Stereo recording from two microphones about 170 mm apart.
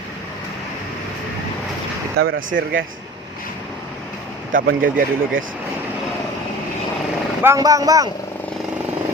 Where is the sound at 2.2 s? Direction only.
80° right.